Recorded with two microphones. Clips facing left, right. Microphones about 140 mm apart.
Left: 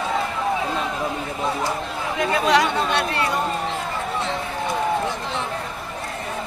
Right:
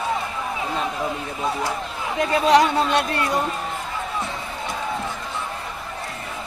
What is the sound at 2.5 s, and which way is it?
Speech, 40° right (ahead or behind).